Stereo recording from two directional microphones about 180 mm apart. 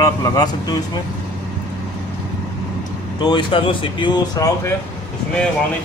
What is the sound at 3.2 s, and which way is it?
Speech, 25° left (ahead or behind).